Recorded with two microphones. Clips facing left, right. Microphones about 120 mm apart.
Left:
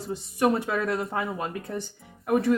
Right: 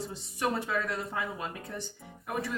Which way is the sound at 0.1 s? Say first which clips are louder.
Left 11 dB; 55° left (ahead or behind).